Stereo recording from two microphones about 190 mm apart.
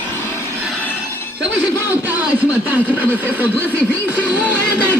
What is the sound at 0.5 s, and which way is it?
Train, 5° right (ahead or behind).